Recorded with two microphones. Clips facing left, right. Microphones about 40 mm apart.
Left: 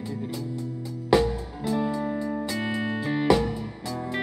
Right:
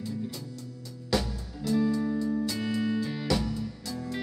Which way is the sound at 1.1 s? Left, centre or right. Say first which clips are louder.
Left 8 dB; left.